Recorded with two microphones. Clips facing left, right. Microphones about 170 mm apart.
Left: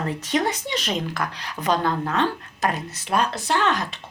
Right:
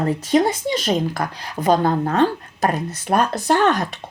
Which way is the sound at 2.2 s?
50° right (ahead or behind).